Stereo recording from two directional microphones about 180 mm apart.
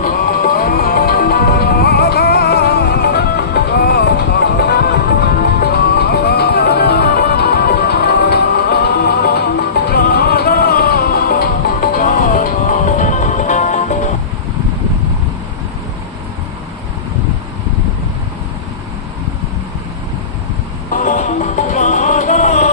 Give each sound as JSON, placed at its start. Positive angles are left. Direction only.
{"t": 0.0, "sound": "music", "side_deg": 50}
{"t": 20.9, "sound": "music", "side_deg": 45}